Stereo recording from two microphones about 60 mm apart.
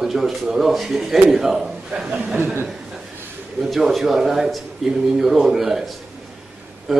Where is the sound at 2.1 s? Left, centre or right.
Right.